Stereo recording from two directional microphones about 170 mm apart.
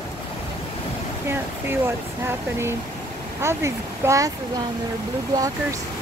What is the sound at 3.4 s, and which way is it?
Speech, 15° right (ahead or behind).